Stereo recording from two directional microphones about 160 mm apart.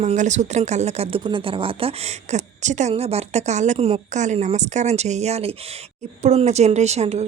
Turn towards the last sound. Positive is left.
turn(degrees=-45)  # may be behind; listen again after turning